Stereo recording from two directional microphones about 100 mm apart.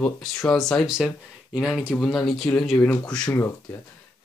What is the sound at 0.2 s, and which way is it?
Speech, 5° left (ahead or behind).